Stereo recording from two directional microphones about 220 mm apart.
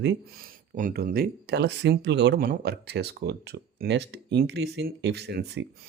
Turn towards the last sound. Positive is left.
turn(degrees=-50)  # may be behind; listen again after turning